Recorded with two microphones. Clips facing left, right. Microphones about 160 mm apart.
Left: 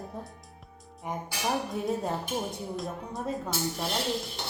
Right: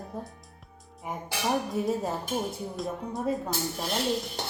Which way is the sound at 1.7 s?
Centre (ahead or behind).